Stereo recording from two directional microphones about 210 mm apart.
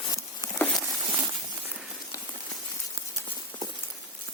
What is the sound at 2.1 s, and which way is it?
Rain on surface, 15° left (ahead or behind).